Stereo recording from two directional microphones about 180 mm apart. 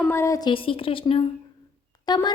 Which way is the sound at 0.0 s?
15° left (ahead or behind).